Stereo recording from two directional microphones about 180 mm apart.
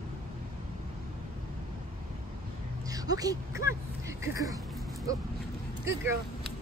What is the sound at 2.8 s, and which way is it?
Speech, 20° right (ahead or behind).